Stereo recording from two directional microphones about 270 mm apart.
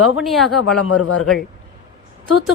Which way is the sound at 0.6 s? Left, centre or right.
Left.